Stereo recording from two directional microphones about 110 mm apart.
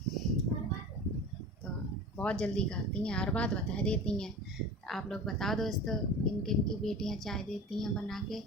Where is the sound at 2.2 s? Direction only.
10° left (ahead or behind).